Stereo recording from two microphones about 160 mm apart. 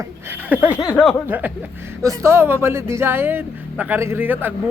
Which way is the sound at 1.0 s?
10° right (ahead or behind).